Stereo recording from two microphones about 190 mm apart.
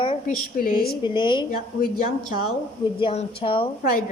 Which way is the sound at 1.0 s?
25° left (ahead or behind).